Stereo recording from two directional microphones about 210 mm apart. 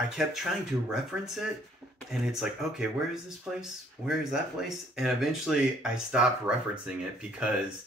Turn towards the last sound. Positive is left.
turn(degrees=-5)  # may be behind; listen again after turning